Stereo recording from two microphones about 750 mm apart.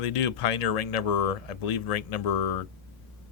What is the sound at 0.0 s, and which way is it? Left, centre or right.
Speech, left.